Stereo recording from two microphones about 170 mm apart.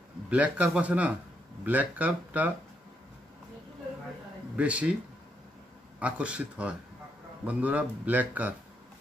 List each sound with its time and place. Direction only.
0.3 s a man's voice: 10° right (ahead or behind)
4.6 s a man's voice: 5° right (ahead or behind)
5.9 s a man's voice: 5° right (ahead or behind)